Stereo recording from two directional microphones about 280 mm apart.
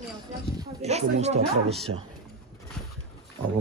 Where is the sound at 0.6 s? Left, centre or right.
Right.